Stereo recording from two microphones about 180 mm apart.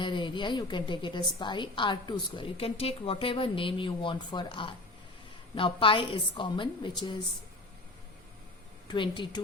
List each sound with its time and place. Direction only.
0.0 s a woman's voice: 25° left (ahead or behind)
8.9 s a woman's voice: 25° left (ahead or behind)